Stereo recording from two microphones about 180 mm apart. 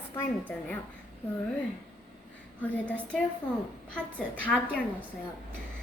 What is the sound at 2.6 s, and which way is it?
Speech, 10° left (ahead or behind).